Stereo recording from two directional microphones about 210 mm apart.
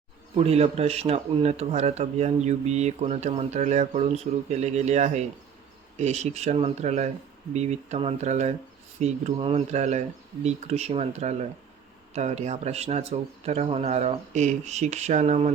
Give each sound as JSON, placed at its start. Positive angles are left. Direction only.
{"t": 0.3, "sound": "speech", "side_deg": -30}